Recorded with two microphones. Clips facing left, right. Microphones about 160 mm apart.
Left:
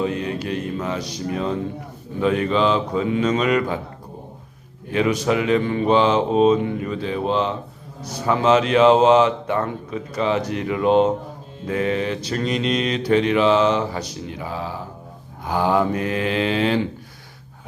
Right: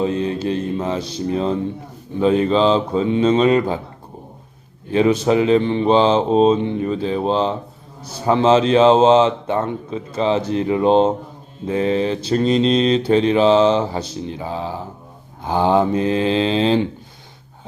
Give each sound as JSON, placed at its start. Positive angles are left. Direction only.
{"t": 0.0, "sound": "mantra", "side_deg": -30}
{"t": 4.9, "sound": "mantra", "side_deg": -30}